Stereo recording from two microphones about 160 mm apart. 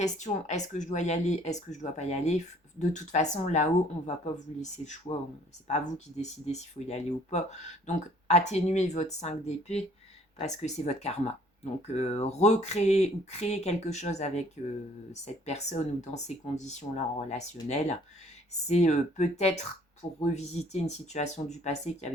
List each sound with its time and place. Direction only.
0.0 s speech: 45° left (ahead or behind)